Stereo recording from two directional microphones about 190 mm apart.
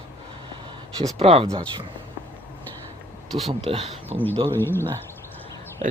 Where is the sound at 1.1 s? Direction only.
30° right (ahead or behind).